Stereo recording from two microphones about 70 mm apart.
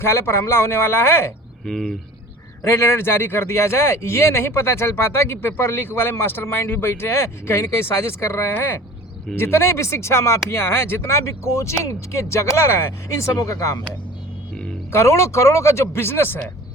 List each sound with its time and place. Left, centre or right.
0.0 s speech: left
1.6 s speech: centre
2.6 s speech: left
14.9 s speech: left